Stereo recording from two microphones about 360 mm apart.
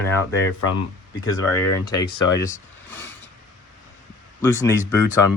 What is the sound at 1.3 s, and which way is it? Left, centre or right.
Speech, left.